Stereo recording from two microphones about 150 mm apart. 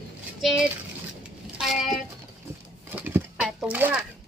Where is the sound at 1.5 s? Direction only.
Centre (ahead or behind).